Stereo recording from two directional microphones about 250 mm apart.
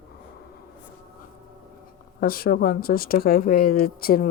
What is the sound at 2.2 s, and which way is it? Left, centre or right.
Speech, left.